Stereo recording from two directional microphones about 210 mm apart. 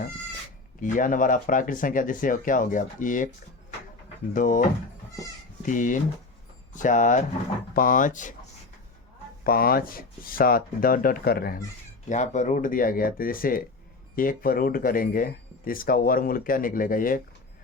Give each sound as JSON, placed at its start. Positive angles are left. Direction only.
{"t": 0.8, "sound": "speech", "side_deg": 40}
{"t": 4.4, "sound": "speech", "side_deg": 40}
{"t": 5.6, "sound": "speech", "side_deg": 40}
{"t": 9.4, "sound": "speech", "side_deg": 45}
{"t": 12.0, "sound": "speech", "side_deg": 35}